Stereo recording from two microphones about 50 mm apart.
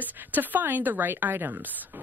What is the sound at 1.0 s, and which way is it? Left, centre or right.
Speech, right.